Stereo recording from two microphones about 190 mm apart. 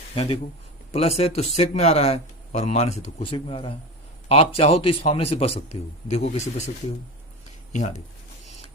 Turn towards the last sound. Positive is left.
turn(degrees=40)  # may be behind; listen again after turning